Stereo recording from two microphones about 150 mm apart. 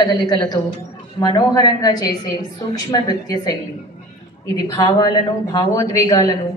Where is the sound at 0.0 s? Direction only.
25° left (ahead or behind).